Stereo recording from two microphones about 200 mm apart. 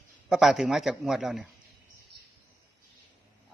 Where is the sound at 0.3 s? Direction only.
Centre (ahead or behind).